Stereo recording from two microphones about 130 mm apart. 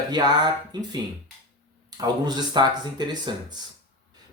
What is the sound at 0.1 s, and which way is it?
Speech, 30° right (ahead or behind).